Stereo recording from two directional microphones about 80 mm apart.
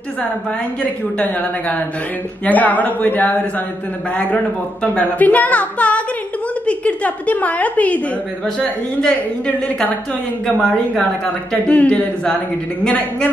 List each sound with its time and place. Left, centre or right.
1.1 s a woman's voice: centre
10.4 s a woman's voice: centre
11.2 s a woman's voice: centre